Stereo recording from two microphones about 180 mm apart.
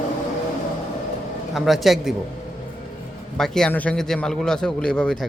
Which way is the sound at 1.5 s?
Centre (ahead or behind).